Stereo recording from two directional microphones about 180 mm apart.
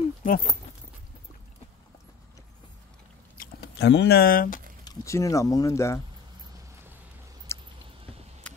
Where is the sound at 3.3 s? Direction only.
65° left (ahead or behind).